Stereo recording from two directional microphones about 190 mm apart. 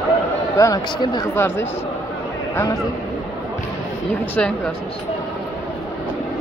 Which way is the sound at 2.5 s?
15° left (ahead or behind).